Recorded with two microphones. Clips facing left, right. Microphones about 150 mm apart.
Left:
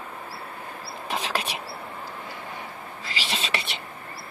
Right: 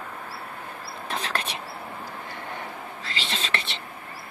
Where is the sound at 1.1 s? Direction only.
10° left (ahead or behind).